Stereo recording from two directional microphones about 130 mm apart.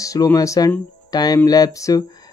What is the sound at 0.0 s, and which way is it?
Speech, 25° left (ahead or behind).